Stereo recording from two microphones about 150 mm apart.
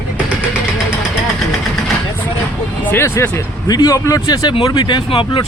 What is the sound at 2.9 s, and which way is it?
Speech, 15° left (ahead or behind).